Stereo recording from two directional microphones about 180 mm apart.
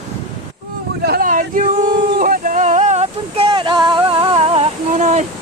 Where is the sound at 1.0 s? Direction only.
55° right (ahead or behind).